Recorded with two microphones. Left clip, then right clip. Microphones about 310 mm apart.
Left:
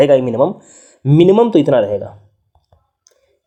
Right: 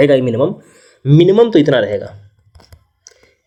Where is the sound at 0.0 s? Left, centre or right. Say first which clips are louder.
Left 1 dB; centre.